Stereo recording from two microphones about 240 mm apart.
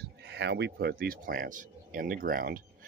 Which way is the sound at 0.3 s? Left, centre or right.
Right.